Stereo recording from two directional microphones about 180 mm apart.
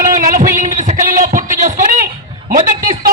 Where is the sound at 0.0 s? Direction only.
45° right (ahead or behind).